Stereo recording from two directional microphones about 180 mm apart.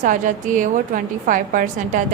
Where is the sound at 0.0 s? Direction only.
45° right (ahead or behind).